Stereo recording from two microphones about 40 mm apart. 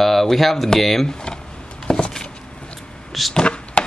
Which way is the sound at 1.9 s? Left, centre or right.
Left.